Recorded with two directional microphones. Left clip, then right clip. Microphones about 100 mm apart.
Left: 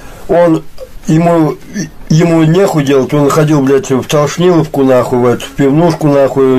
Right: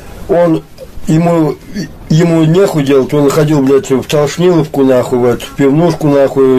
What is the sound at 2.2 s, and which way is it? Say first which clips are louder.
A man's voice: left 1 dB; 30° right (ahead or behind).